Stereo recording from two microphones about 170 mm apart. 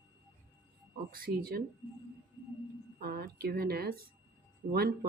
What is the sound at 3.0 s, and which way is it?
Speech, 60° right (ahead or behind).